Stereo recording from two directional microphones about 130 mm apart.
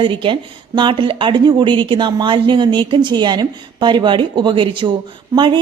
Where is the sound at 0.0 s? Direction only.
40° right (ahead or behind).